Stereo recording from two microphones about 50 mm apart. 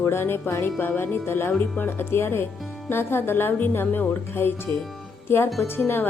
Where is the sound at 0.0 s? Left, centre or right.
Left.